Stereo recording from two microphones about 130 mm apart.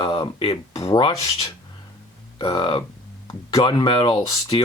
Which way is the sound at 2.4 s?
40° left (ahead or behind).